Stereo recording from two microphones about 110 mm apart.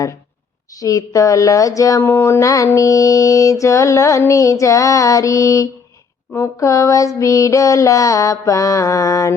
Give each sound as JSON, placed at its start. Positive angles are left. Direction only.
{"t": 0.8, "sound": "speech", "side_deg": 30}